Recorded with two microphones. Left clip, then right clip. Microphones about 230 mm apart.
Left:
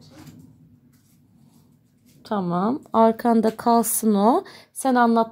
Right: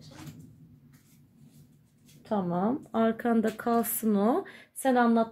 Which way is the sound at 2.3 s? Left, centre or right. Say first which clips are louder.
Left 5 dB; left.